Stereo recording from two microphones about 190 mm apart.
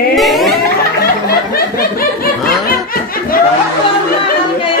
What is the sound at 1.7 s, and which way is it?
Snicker, 50° left (ahead or behind).